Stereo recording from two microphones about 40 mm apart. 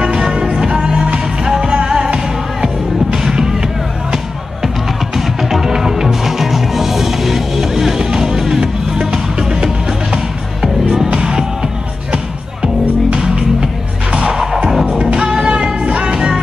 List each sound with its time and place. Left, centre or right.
0.0 s music: centre
5.1 s music: centre
10.6 s music: centre
11.1 s music: right
13.2 s music: centre
14.9 s music: right